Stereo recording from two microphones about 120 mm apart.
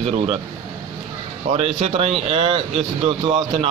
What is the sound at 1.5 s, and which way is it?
Speech, 55° right (ahead or behind).